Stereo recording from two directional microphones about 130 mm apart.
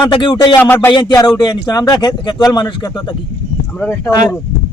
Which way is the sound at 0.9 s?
35° left (ahead or behind).